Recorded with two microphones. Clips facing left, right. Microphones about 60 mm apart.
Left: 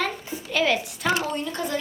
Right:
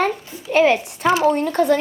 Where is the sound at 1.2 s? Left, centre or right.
Right.